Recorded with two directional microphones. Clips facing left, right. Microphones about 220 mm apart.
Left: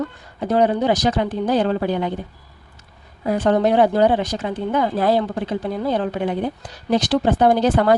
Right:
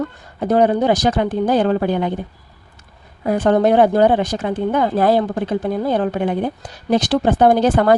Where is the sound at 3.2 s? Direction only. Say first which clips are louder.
Right 3 dB; 50° right (ahead or behind).